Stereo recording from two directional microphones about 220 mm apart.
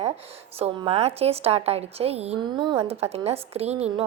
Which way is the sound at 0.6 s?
25° right (ahead or behind).